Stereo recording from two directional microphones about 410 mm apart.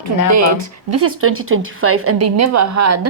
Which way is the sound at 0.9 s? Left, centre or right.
Right.